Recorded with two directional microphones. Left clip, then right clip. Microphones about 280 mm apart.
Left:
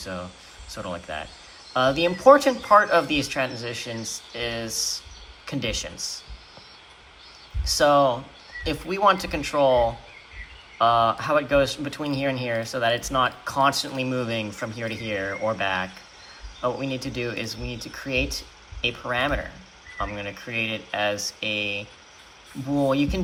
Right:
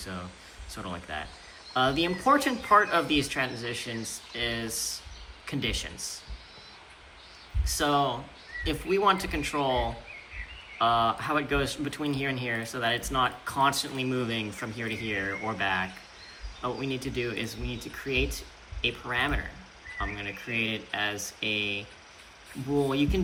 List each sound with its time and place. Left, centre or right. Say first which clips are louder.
0.0 s speech: left 6 dB; centre
7.6 s speech: left 8 dB; centre
10.8 s speech: left 5 dB; centre
22.9 s speech: left 5 dB; centre